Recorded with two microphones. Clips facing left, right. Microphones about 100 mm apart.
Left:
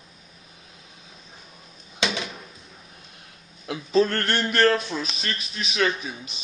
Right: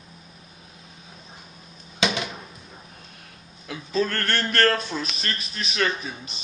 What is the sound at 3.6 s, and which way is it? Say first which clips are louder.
A man's voice: left 4 dB; 25° left (ahead or behind).